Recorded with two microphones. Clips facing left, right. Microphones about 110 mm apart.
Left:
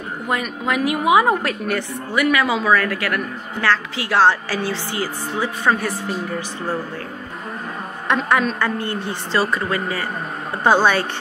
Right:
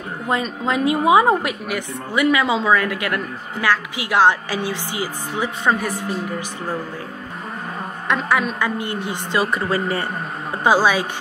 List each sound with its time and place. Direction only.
0.3 s a woman's voice: 25° right (ahead or behind)
1.4 s a woman's voice: 10° right (ahead or behind)
8.1 s a woman's voice: 5° right (ahead or behind)
9.5 s a woman's voice: 30° right (ahead or behind)
10.6 s a woman's voice: 5° right (ahead or behind)